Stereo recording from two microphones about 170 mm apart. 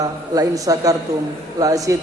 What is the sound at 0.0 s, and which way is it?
A man's voice, 20° right (ahead or behind).